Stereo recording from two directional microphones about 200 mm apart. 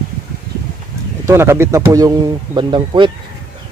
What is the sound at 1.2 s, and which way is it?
Speech, 10° right (ahead or behind).